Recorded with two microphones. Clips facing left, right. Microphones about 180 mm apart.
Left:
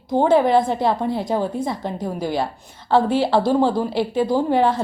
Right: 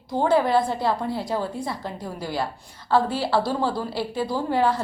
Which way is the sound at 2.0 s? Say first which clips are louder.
Left 7 dB; 50° left (ahead or behind).